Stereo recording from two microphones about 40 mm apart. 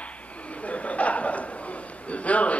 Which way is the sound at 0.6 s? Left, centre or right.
Left.